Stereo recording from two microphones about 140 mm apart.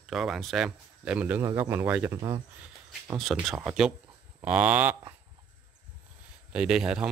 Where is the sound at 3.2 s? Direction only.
Centre (ahead or behind).